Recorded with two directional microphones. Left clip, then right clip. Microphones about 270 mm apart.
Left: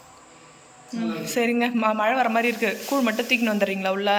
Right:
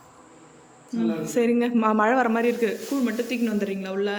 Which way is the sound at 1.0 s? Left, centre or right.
Centre.